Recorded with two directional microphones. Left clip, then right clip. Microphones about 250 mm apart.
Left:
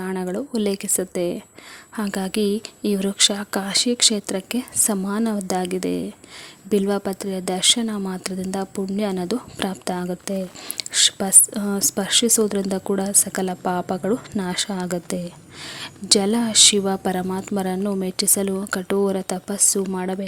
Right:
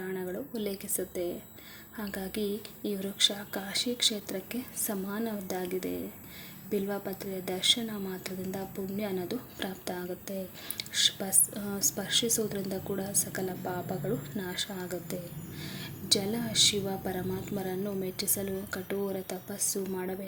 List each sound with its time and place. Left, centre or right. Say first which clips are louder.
0.0 s speech: left 9 dB; left